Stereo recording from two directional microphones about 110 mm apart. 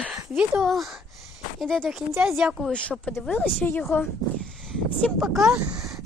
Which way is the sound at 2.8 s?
10° left (ahead or behind).